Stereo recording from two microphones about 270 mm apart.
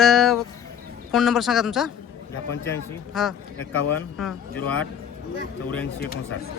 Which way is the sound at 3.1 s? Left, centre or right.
Centre.